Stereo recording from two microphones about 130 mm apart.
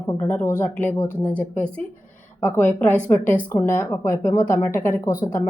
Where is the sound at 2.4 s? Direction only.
15° left (ahead or behind).